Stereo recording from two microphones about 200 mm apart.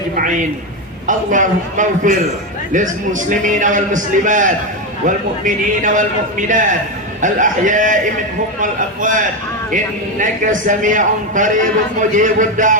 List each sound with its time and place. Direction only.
0.2 s a man's voice: 40° right (ahead or behind)